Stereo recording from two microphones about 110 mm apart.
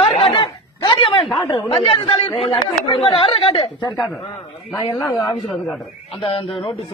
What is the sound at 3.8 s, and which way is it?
Speech, centre (ahead or behind).